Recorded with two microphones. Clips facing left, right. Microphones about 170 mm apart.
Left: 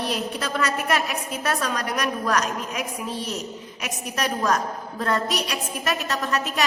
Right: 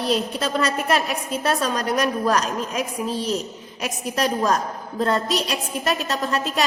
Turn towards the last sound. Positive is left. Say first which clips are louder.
# right 2 dB
turn(degrees=-30)  # may be behind; listen again after turning